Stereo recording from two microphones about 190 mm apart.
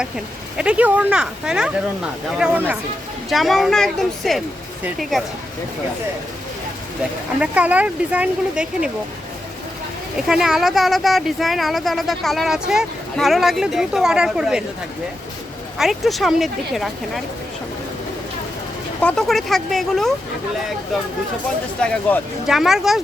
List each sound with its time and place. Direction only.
0.5 s speech: 5° right (ahead or behind)
7.3 s speech: 5° right (ahead or behind)
10.2 s speech: 5° right (ahead or behind)
15.8 s speech: centre (ahead or behind)
19.0 s speech: centre (ahead or behind)
21.8 s speech: centre (ahead or behind)